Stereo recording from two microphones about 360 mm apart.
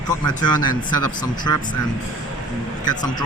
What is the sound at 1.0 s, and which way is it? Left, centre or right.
Speech, left.